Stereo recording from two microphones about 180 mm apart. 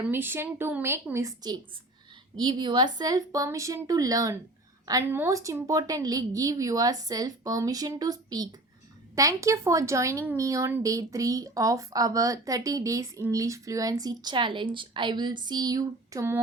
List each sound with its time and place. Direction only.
0.1 s a woman's voice: 10° right (ahead or behind)